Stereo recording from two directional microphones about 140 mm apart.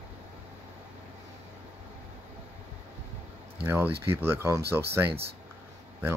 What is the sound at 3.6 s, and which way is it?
Speech, 15° right (ahead or behind).